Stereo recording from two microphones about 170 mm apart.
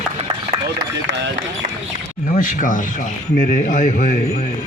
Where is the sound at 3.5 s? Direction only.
50° left (ahead or behind).